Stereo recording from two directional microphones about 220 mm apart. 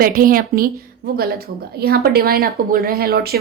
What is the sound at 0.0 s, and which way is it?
A woman's voice, 40° right (ahead or behind).